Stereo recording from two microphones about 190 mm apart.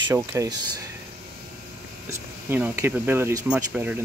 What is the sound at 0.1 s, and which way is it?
Speech, 15° right (ahead or behind).